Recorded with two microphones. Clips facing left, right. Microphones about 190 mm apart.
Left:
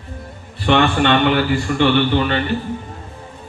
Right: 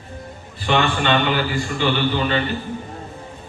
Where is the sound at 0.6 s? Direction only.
55° left (ahead or behind).